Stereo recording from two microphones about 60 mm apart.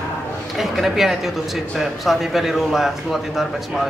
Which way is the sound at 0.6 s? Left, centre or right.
Centre.